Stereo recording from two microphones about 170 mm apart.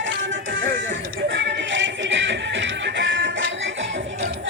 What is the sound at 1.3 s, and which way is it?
Music, 90° right.